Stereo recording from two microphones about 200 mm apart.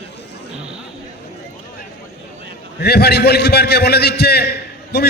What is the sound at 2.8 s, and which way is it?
A man's voice, 55° left (ahead or behind).